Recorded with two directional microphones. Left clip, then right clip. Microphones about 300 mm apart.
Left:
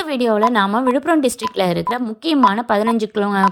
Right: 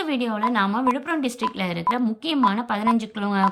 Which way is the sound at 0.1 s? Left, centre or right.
Centre.